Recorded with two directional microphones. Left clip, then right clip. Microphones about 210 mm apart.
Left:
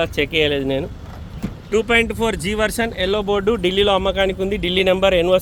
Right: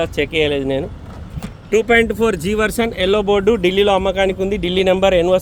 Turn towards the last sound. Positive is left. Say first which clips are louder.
# right 2 dB
turn(degrees=-10)  # may be behind; listen again after turning